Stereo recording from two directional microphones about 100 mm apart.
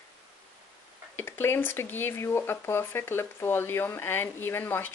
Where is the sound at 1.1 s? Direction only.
20° left (ahead or behind).